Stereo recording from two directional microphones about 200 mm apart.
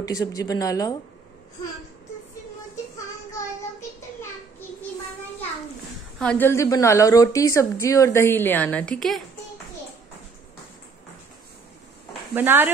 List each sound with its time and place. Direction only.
0.0 s a woman's voice: 15° left (ahead or behind)
6.1 s a woman's voice: 5° left (ahead or behind)
12.4 s speech: 10° right (ahead or behind)